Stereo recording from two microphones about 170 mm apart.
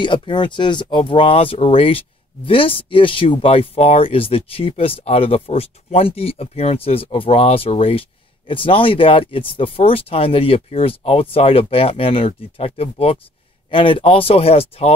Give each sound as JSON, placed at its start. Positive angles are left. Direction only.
{"t": 0.0, "sound": "speech", "side_deg": 30}